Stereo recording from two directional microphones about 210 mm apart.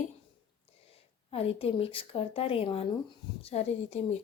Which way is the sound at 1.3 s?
25° left (ahead or behind).